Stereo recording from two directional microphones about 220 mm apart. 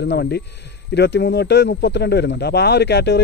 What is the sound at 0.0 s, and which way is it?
A man's voice, 50° left (ahead or behind).